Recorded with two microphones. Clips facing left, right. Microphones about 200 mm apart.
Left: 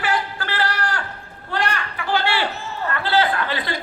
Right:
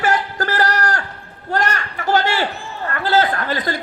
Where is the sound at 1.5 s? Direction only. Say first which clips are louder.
Right 3 dB; 45° right (ahead or behind).